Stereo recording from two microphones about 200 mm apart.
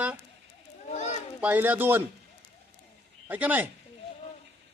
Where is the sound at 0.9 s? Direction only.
35° left (ahead or behind).